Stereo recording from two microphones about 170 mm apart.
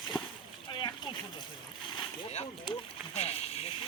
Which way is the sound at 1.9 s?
40° left (ahead or behind).